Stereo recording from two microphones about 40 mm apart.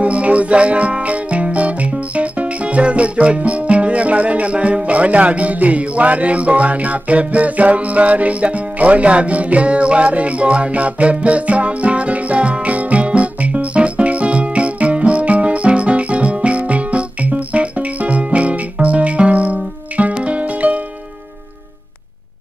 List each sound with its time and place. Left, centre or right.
0.0 s music: right